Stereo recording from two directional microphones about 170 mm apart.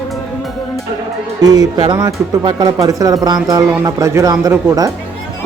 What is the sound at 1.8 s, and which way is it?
Speech, 25° right (ahead or behind).